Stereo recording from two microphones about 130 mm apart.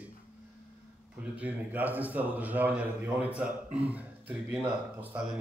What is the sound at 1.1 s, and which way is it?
A man's voice, 10° right (ahead or behind).